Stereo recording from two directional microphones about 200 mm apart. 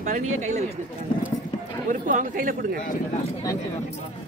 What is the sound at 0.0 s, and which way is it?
Speech, 40° right (ahead or behind).